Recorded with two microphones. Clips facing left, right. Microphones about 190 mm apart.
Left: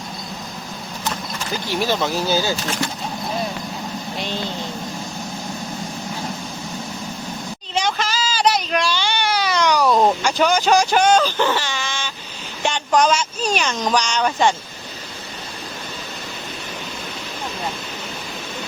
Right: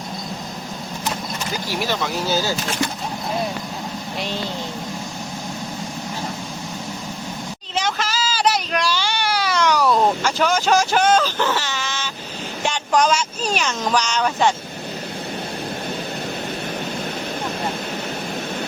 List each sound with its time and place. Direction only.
7.8 s baby cry: 5° right (ahead or behind)
9.8 s a sound: 15° left (ahead or behind)
10.2 s speech: centre (ahead or behind)